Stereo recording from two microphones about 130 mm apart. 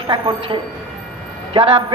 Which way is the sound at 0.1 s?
40° right (ahead or behind).